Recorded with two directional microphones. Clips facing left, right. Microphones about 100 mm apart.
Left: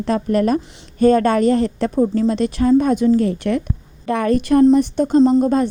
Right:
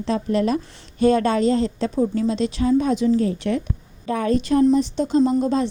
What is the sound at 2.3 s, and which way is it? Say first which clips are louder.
A woman's voice: left 4 dB; 55° left (ahead or behind).